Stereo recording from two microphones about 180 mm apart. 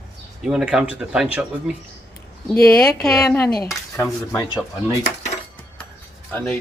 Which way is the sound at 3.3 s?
15° left (ahead or behind).